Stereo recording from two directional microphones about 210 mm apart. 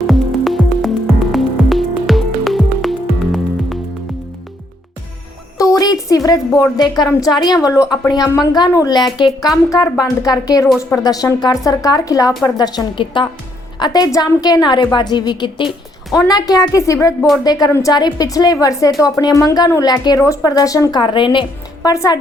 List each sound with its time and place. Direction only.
0.1 s music: centre (ahead or behind)
5.5 s a sound: 15° left (ahead or behind)
7.1 s a woman's voice: 20° left (ahead or behind)